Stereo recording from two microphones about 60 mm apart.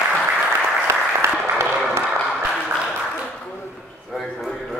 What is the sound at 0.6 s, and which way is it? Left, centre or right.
Applause, right.